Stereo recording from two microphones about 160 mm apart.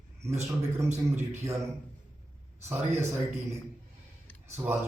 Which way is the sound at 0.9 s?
15° right (ahead or behind).